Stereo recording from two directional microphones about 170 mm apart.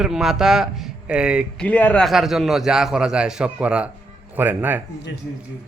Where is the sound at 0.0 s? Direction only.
5° right (ahead or behind).